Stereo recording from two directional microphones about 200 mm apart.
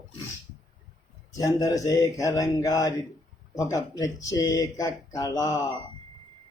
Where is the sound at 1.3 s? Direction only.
15° left (ahead or behind).